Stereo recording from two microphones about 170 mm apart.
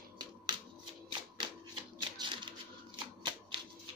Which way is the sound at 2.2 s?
30° right (ahead or behind).